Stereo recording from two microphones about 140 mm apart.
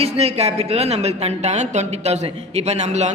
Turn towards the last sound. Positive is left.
turn(degrees=-55)  # may be behind; listen again after turning